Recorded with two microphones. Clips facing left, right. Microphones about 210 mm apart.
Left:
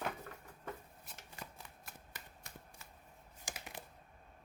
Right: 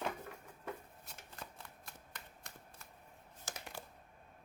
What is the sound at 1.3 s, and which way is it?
Shuffling cards, 5° left (ahead or behind).